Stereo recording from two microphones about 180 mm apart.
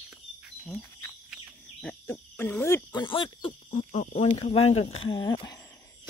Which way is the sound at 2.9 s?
25° left (ahead or behind).